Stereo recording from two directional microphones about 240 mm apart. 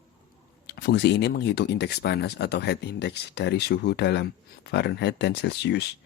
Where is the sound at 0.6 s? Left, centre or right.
Left.